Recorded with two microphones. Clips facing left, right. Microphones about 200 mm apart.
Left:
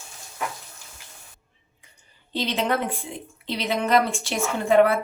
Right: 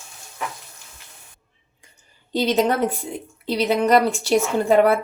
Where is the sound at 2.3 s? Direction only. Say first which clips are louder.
Right 5 dB; 40° right (ahead or behind).